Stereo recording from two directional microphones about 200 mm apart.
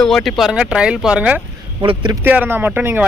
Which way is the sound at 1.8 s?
20° right (ahead or behind).